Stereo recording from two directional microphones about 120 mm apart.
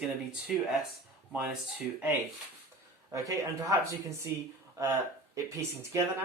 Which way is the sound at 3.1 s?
25° right (ahead or behind).